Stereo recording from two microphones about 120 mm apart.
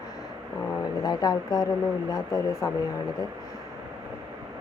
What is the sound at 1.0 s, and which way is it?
Speech, 35° left (ahead or behind).